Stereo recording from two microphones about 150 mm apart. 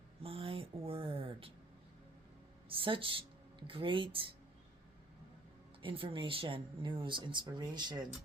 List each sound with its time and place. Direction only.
0.2 s a sound: 40° right (ahead or behind)
2.6 s speech: 35° right (ahead or behind)
5.8 s speech: 35° right (ahead or behind)